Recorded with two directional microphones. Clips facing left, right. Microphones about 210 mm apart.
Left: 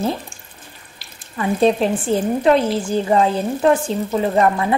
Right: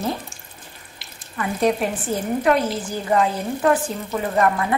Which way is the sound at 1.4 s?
25° left (ahead or behind).